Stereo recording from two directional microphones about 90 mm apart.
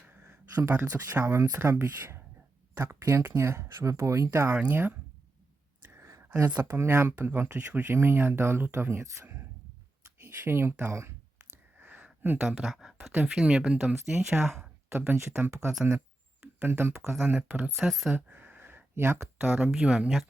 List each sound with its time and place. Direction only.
1.1 s speech: 30° right (ahead or behind)
4.5 s speech: 15° right (ahead or behind)
5.8 s a sound: 25° right (ahead or behind)
6.2 s speech: 20° right (ahead or behind)
11.8 s a sound: 20° right (ahead or behind)
12.4 s speech: 5° right (ahead or behind)
14.8 s speech: 25° right (ahead or behind)
16.6 s speech: 25° right (ahead or behind)
17.3 s speech: 15° right (ahead or behind)
17.7 s speech: 5° right (ahead or behind)
18.1 s a sound: 20° right (ahead or behind)
19.7 s speech: 10° right (ahead or behind)